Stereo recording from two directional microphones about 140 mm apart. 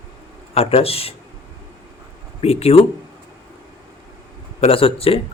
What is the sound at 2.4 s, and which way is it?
Speech, 45° left (ahead or behind).